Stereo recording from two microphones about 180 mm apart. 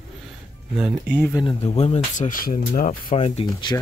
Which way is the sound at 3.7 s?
15° left (ahead or behind).